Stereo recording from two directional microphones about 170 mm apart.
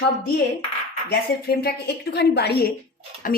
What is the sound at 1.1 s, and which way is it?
A woman's voice, 65° left (ahead or behind).